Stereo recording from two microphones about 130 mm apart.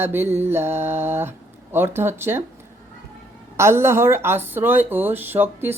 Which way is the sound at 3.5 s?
20° right (ahead or behind).